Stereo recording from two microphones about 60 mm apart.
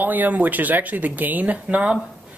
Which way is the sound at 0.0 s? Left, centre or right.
Right.